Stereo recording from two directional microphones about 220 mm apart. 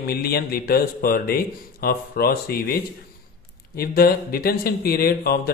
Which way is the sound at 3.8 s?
40° left (ahead or behind).